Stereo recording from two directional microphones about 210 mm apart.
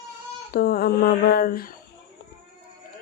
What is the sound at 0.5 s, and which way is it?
A woman's voice, 45° left (ahead or behind).